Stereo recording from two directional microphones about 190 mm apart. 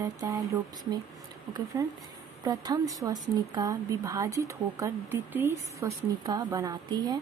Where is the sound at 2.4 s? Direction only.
20° right (ahead or behind).